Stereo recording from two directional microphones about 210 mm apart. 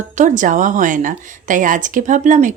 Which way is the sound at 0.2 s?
35° right (ahead or behind).